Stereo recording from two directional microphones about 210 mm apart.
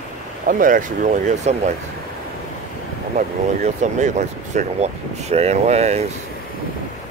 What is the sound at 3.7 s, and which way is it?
Speech, 35° right (ahead or behind).